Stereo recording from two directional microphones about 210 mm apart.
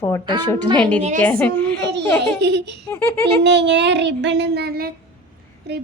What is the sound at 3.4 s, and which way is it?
Child singing, 55° right (ahead or behind).